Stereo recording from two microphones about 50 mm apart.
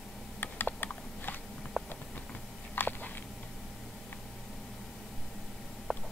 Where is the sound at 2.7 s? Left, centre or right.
Left.